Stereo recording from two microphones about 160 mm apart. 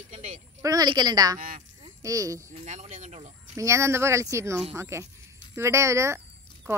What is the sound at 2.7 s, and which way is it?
Speech, 45° right (ahead or behind).